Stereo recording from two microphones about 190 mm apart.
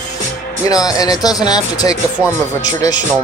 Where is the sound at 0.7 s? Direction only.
20° left (ahead or behind).